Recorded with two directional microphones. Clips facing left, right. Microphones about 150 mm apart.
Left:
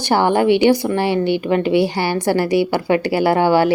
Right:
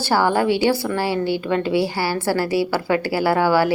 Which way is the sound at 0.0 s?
20° left (ahead or behind).